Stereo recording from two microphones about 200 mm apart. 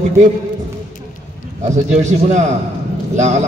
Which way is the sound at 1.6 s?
35° right (ahead or behind).